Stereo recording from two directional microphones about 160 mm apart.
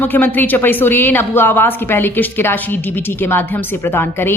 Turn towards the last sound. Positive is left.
turn(degrees=15)  # may be behind; listen again after turning